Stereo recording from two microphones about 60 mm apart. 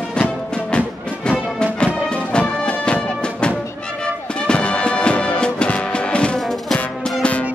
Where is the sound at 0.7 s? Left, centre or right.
Centre.